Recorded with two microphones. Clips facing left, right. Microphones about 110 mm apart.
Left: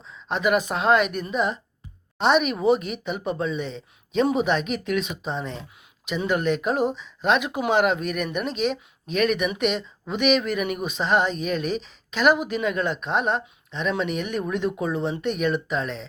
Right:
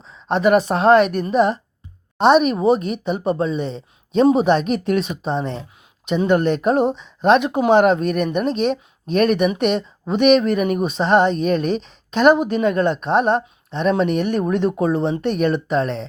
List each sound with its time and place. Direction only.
0.3 s speech: 40° right (ahead or behind)
6.1 s speech: 35° right (ahead or behind)